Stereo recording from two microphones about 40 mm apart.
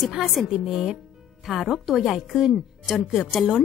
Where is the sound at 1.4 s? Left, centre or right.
Centre.